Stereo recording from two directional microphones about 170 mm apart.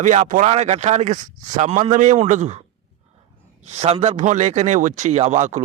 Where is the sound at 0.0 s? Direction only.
45° right (ahead or behind).